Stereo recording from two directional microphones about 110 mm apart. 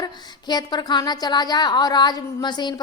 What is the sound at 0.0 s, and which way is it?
A woman's voice, 40° left (ahead or behind).